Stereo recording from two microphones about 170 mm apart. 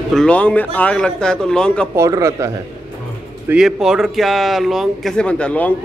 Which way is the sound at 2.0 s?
20° right (ahead or behind).